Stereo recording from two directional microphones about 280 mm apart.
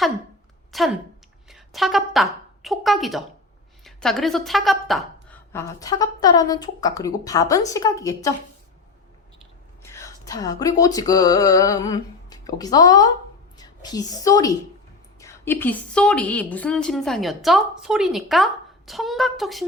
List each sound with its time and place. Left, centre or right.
0.7 s a woman's voice: centre
9.8 s a woman's voice: centre